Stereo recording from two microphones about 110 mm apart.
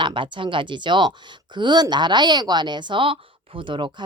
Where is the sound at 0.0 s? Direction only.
50° right (ahead or behind).